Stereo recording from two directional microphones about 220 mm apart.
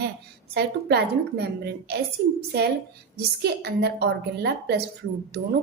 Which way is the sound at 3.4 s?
50° right (ahead or behind).